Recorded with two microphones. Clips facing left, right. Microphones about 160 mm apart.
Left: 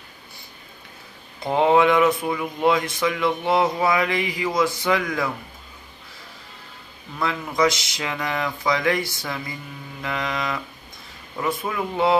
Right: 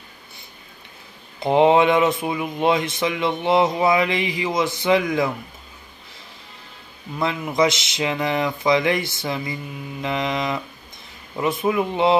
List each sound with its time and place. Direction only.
1.4 s speech: 25° right (ahead or behind)
7.2 s speech: 25° right (ahead or behind)